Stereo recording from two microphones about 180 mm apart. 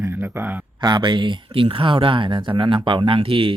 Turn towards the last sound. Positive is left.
turn(degrees=-30)  # may be behind; listen again after turning